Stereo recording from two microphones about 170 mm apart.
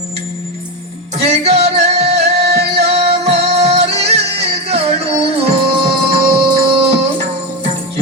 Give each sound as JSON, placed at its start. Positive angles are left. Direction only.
{"t": 1.2, "sound": "music", "side_deg": -35}